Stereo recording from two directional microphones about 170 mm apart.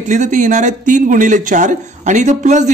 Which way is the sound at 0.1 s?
45° right (ahead or behind).